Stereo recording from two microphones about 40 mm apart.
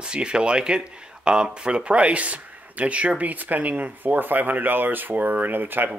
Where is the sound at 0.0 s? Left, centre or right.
Right.